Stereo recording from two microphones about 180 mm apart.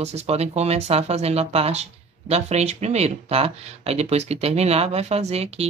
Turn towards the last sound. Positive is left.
turn(degrees=-35)  # may be behind; listen again after turning